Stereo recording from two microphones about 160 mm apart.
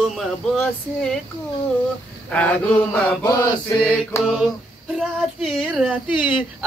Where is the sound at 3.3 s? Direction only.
25° left (ahead or behind).